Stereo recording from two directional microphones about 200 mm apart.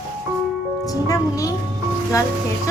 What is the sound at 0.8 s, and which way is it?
Speech, 15° left (ahead or behind).